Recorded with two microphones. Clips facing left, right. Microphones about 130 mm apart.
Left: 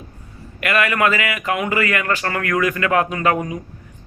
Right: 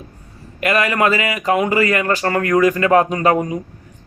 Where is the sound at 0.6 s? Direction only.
30° right (ahead or behind).